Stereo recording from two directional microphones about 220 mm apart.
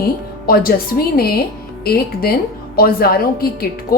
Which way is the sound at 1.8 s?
45° left (ahead or behind).